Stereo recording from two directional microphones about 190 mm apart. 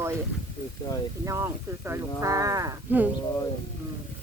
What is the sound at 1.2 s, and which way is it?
Speech, 15° right (ahead or behind).